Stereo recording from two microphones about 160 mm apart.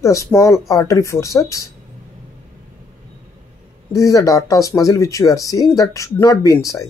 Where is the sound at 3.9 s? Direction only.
20° left (ahead or behind).